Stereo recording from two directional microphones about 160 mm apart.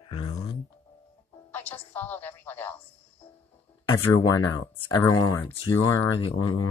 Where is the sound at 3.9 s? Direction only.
30° left (ahead or behind).